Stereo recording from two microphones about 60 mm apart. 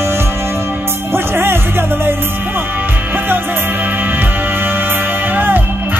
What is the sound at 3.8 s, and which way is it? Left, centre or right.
Music, right.